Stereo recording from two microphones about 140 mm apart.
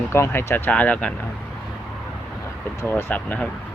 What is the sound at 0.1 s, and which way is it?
Speech, 20° left (ahead or behind).